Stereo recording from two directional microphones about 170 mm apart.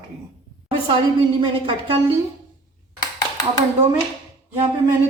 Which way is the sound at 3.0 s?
20° left (ahead or behind).